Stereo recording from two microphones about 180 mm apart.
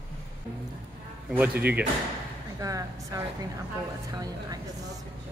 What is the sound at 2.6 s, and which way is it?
A woman's voice, 20° right (ahead or behind).